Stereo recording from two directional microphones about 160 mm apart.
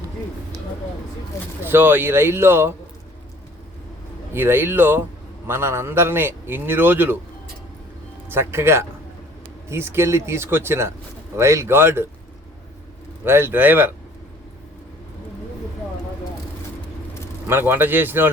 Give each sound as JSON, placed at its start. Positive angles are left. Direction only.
{"t": 1.6, "sound": "a man's voice", "side_deg": -15}
{"t": 4.4, "sound": "a man's voice", "side_deg": -15}
{"t": 8.3, "sound": "a man's voice", "side_deg": -15}
{"t": 13.2, "sound": "a man's voice", "side_deg": -15}
{"t": 17.5, "sound": "a man's voice", "side_deg": -15}